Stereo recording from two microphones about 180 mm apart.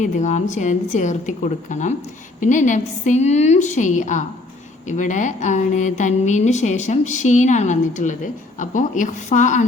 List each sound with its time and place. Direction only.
0.0 s a woman's voice: 40° left (ahead or behind)